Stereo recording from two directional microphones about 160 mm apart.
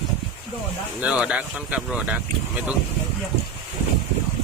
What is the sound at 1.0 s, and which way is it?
Speech, 5° right (ahead or behind).